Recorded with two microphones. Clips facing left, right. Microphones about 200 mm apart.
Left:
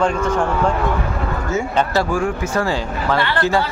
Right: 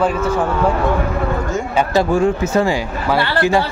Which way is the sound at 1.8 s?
20° right (ahead or behind).